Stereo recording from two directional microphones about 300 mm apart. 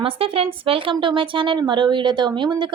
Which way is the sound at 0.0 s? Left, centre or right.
Centre.